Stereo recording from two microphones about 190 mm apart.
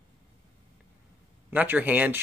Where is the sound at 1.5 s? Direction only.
10° right (ahead or behind).